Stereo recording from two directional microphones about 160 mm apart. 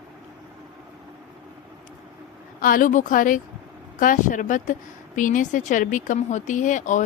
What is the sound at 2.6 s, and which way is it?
A woman's voice, 60° left (ahead or behind).